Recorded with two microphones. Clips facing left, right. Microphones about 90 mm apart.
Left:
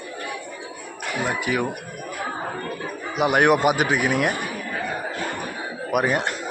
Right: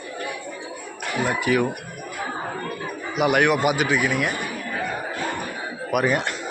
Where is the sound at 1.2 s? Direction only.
20° left (ahead or behind).